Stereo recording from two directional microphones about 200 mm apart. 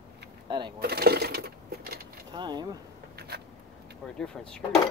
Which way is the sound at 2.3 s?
20° right (ahead or behind).